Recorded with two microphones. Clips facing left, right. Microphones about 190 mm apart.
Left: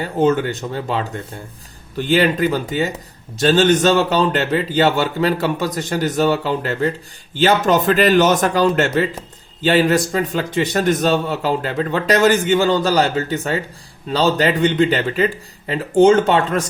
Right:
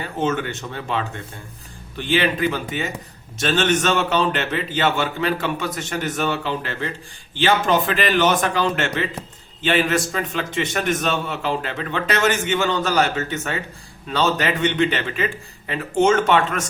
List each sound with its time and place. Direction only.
0.0 s a man's voice: 35° left (ahead or behind)